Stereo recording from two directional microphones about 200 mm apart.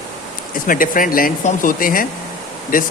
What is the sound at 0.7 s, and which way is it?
A man's voice, 45° left (ahead or behind).